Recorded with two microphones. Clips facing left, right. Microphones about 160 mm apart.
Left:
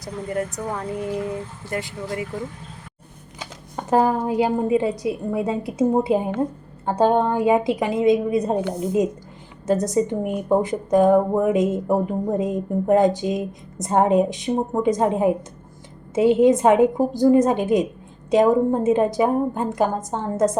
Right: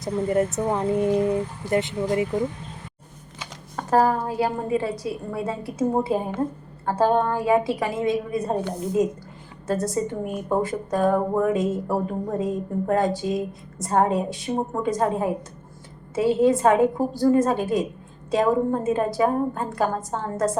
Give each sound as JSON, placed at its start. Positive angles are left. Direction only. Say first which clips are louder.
{"t": 0.0, "sound": "speech", "louder": "right 5 dB", "side_deg": -25}
{"t": 3.8, "sound": "a woman's voice", "louder": "left 1 dB", "side_deg": 20}
{"t": 9.6, "sound": "speech", "louder": "left 5 dB", "side_deg": 20}